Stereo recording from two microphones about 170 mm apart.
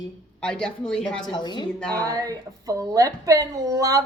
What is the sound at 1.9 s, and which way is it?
A woman's voice, 20° right (ahead or behind).